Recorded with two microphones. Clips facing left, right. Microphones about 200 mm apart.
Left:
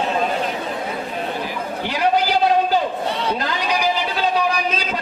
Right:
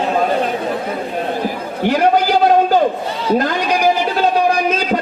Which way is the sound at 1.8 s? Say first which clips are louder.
Right 6 dB; 50° right (ahead or behind).